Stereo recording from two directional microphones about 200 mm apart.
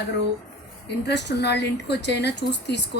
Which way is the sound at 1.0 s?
60° left (ahead or behind).